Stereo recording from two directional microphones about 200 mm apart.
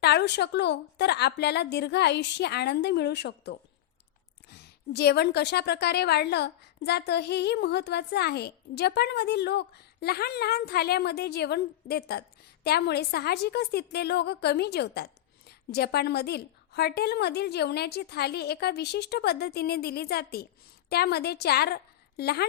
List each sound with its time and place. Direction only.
0.0 s a woman's voice: 55° left (ahead or behind)